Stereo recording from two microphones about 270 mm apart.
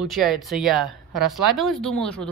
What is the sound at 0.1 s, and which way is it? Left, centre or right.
Speech, centre.